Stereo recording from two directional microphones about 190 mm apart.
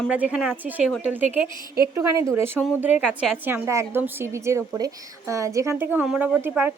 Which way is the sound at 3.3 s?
10° right (ahead or behind).